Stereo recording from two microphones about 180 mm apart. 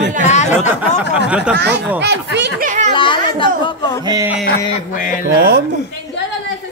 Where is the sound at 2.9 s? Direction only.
25° left (ahead or behind).